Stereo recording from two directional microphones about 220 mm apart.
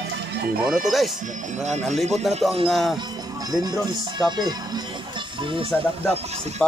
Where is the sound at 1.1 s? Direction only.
35° right (ahead or behind).